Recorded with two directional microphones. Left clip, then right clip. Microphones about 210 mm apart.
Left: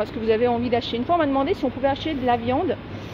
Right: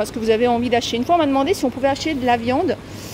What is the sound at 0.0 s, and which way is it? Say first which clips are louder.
Speech: right 3 dB; 25° right (ahead or behind).